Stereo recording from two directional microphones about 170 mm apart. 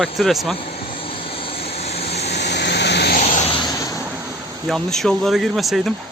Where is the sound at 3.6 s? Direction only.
20° left (ahead or behind).